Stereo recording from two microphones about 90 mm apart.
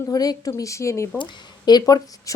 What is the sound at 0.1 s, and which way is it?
Speech, 45° left (ahead or behind).